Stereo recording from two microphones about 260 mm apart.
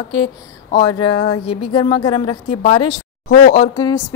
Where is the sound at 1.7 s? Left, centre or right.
Centre.